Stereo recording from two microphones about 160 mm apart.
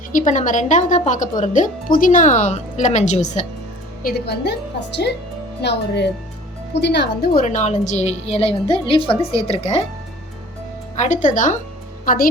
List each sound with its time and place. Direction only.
0.1 s speech: 50° left (ahead or behind)
4.0 s speech: 90° left
5.6 s speech: 90° left
7.4 s a woman's voice: 50° left (ahead or behind)
10.9 s a woman's voice: 50° left (ahead or behind)